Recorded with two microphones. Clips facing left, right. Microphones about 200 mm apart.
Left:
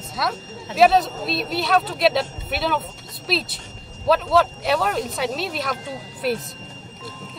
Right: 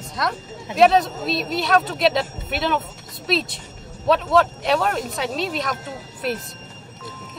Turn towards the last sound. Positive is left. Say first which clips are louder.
# left 2 dB
turn(degrees=0)  # may be behind; listen again after turning